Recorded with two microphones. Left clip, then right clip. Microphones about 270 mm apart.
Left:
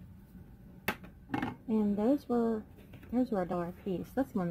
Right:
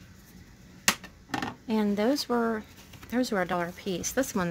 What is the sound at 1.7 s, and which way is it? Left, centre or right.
Speech, right.